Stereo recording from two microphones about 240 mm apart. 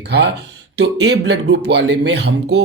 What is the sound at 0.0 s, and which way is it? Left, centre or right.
Speech, right.